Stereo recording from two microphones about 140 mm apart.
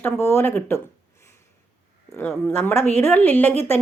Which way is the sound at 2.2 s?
15° left (ahead or behind).